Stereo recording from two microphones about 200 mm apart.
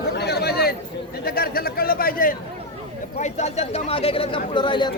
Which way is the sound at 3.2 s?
35° left (ahead or behind).